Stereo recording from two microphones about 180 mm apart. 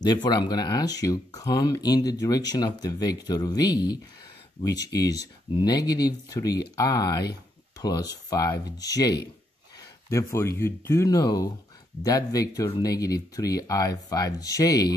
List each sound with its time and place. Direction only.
0.0 s speech: 25° left (ahead or behind)